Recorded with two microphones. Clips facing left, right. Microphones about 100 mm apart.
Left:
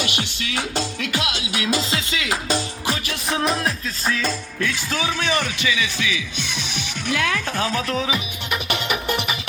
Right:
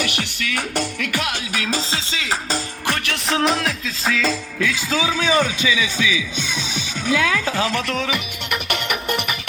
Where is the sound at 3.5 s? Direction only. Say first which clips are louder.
Right 1 dB; 90° right.